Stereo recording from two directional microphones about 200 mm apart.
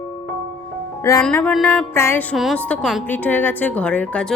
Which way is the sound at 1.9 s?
10° left (ahead or behind).